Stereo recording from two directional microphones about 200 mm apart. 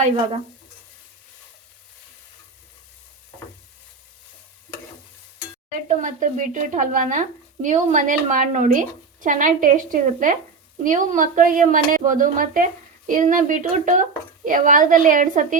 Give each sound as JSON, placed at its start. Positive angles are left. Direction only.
{"t": 5.7, "sound": "speech", "side_deg": -40}